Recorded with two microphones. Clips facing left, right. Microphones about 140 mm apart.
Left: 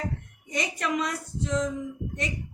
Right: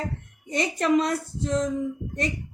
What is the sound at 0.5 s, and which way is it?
Speech, 30° right (ahead or behind).